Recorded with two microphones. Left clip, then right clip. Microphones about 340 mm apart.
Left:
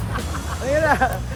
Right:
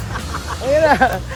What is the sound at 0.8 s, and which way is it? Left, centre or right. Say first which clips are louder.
Speech: right 5 dB; right.